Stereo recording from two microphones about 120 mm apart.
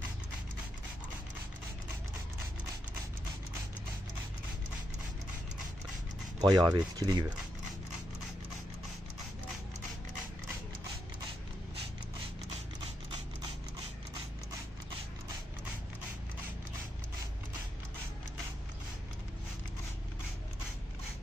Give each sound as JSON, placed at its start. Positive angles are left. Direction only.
{"t": 6.4, "sound": "speech", "side_deg": -35}